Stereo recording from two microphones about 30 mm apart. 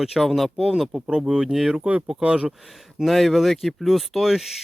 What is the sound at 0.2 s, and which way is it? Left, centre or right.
Speech, centre.